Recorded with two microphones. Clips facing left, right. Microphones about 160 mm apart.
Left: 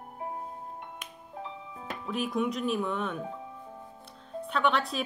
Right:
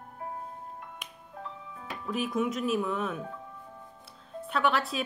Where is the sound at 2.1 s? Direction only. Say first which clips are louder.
Even; centre (ahead or behind).